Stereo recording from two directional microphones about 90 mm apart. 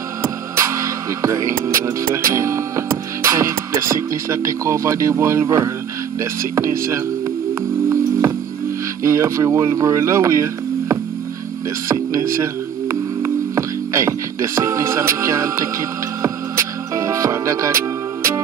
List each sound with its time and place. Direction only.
0.2 s speech: 30° right (ahead or behind)
9.0 s speech: 35° right (ahead or behind)
13.2 s music: 35° right (ahead or behind)